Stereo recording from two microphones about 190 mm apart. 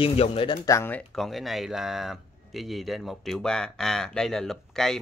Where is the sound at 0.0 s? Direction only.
30° left (ahead or behind).